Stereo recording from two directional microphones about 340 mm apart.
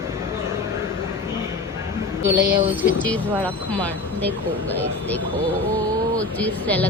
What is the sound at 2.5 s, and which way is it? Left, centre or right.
A woman's voice, centre.